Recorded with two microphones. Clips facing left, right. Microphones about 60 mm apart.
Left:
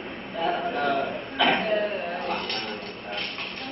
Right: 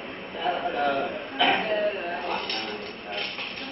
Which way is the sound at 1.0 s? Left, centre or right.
Centre.